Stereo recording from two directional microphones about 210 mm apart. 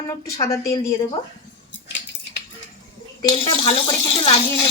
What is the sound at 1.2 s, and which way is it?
Speech, 25° left (ahead or behind).